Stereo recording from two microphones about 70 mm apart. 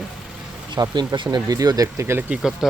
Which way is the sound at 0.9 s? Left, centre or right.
Right.